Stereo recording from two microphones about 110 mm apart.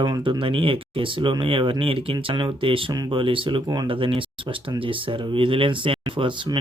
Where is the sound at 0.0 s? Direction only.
45° right (ahead or behind).